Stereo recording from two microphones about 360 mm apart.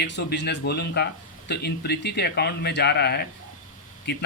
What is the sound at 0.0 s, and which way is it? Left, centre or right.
Speech, left.